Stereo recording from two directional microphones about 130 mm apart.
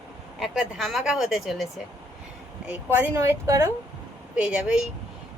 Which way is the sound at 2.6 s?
10° right (ahead or behind).